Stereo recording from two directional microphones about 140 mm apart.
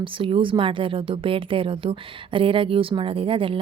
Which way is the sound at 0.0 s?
40° right (ahead or behind).